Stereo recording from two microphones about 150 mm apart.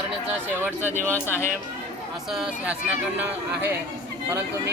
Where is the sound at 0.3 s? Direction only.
10° right (ahead or behind).